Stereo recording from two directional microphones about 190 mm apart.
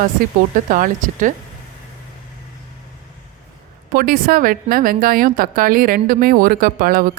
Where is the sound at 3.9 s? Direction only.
50° right (ahead or behind).